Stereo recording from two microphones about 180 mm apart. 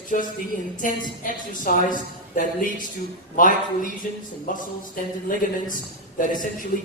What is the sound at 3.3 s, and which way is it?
A man's voice, 50° left (ahead or behind).